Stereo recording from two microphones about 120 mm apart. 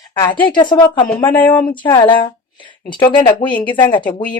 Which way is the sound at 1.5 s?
40° left (ahead or behind).